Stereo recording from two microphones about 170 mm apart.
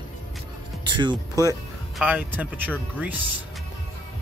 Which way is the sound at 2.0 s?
10° right (ahead or behind).